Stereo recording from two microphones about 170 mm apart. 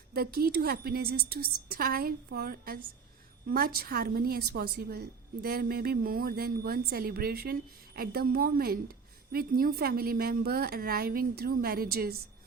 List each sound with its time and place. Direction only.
0.1 s a woman's voice: 65° right (ahead or behind)